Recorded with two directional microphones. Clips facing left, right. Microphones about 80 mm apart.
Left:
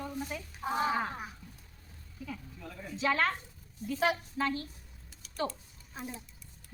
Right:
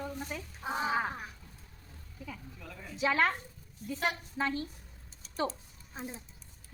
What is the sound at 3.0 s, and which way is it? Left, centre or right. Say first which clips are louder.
Speech: right 1 dB; centre.